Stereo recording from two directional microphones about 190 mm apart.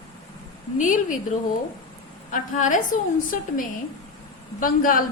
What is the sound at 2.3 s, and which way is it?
Speech, 40° left (ahead or behind).